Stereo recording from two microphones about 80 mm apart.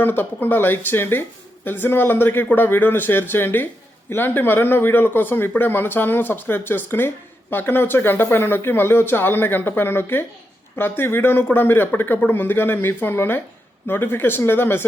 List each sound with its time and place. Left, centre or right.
0.0 s speech: left